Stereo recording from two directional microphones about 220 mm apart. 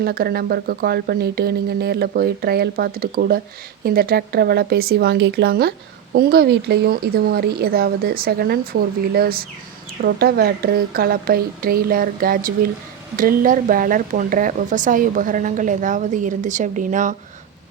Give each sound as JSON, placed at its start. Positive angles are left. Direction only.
{"t": 0.0, "sound": "speech", "side_deg": -45}